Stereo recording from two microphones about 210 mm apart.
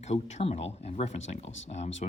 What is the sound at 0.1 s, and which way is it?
Speech, 30° left (ahead or behind).